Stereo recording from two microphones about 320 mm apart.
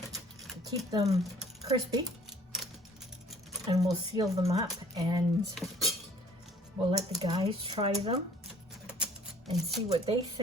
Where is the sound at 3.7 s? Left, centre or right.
Centre.